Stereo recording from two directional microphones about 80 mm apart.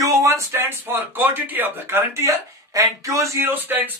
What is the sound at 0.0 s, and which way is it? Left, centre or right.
Speech, right.